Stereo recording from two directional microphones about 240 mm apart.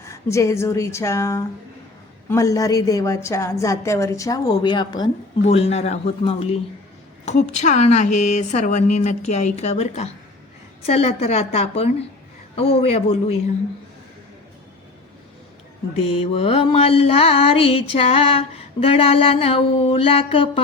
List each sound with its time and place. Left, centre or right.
0.0 s a woman's voice: centre
7.3 s mantra: left
16.0 s mantra: left